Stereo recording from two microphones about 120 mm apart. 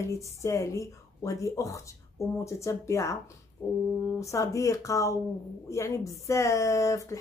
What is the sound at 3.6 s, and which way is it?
Brass instrument, 15° left (ahead or behind).